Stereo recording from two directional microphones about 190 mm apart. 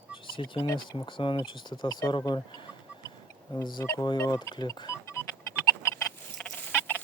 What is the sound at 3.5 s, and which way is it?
Speech, 20° left (ahead or behind).